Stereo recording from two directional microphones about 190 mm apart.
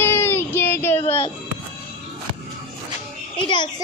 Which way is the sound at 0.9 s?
30° left (ahead or behind).